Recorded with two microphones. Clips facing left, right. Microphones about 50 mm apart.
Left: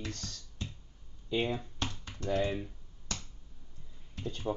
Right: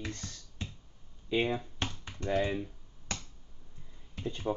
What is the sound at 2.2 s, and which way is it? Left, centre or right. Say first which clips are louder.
Speech: right 1 dB; right.